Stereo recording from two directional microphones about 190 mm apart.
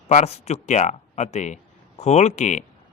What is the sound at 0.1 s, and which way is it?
Speech, 35° left (ahead or behind).